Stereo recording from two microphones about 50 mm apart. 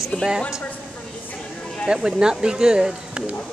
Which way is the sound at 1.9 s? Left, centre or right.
Centre.